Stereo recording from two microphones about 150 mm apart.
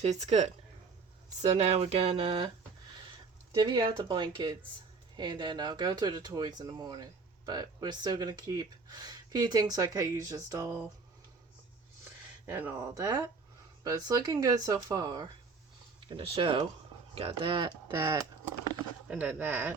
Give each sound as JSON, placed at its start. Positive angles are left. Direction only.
{"t": 0.0, "sound": "speech", "side_deg": -45}
{"t": 3.5, "sound": "speech", "side_deg": -25}
{"t": 12.5, "sound": "speech", "side_deg": -15}
{"t": 12.9, "sound": "speech", "side_deg": -25}
{"t": 16.0, "sound": "speech", "side_deg": -35}
{"t": 17.9, "sound": "speech", "side_deg": -20}
{"t": 19.1, "sound": "speech", "side_deg": -10}